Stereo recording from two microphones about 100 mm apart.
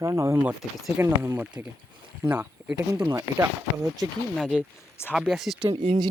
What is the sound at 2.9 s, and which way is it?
Speech, 35° right (ahead or behind).